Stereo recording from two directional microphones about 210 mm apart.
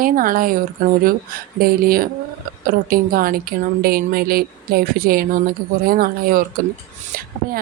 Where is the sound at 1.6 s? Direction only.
45° right (ahead or behind).